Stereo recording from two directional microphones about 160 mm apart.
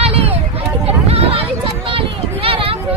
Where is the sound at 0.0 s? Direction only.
40° right (ahead or behind).